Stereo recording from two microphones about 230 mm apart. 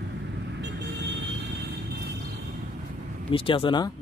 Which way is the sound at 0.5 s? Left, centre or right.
Right.